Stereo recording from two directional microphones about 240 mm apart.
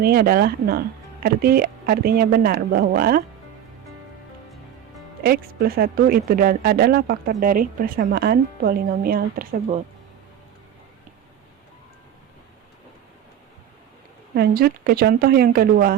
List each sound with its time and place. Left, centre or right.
0.0 s speech: right
5.2 s speech: right
14.3 s speech: right